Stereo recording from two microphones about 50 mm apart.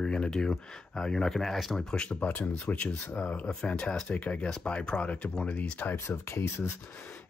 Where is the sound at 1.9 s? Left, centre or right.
Centre.